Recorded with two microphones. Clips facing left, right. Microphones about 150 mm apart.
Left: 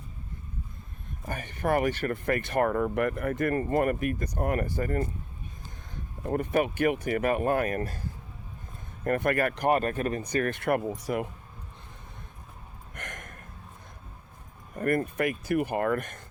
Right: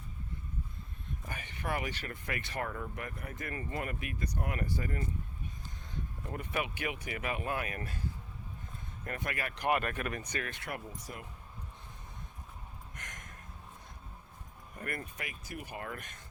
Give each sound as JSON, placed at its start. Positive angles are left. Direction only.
{"t": 1.3, "sound": "speech", "side_deg": 45}
{"t": 9.0, "sound": "speech", "side_deg": 55}
{"t": 10.4, "sound": "speech", "side_deg": 55}
{"t": 10.8, "sound": "speech", "side_deg": 75}
{"t": 12.9, "sound": "a sound", "side_deg": 60}
{"t": 14.8, "sound": "speech", "side_deg": 50}